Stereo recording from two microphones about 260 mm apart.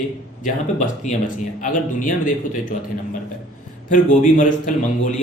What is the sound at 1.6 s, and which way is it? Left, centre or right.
A man's voice, left.